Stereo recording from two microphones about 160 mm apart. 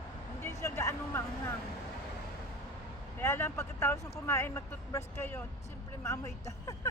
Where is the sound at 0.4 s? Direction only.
15° left (ahead or behind).